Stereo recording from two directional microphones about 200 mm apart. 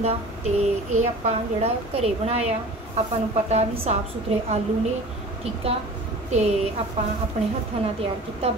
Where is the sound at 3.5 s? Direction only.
30° right (ahead or behind).